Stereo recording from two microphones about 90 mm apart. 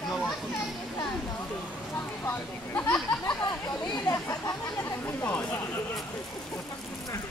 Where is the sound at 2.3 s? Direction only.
20° left (ahead or behind).